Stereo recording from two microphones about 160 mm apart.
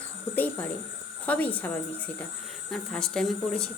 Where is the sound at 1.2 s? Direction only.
10° left (ahead or behind).